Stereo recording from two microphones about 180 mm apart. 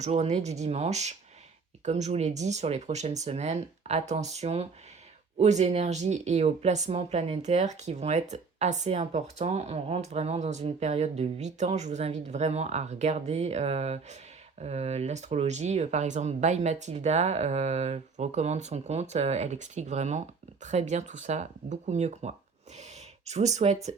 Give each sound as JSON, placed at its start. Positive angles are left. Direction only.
{"t": 0.0, "sound": "speech", "side_deg": -40}